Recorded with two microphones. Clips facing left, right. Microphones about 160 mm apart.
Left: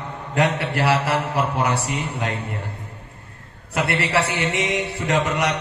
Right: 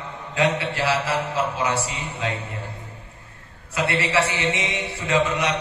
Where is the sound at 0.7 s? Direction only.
60° left (ahead or behind).